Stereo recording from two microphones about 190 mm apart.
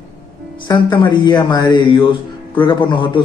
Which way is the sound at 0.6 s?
25° left (ahead or behind).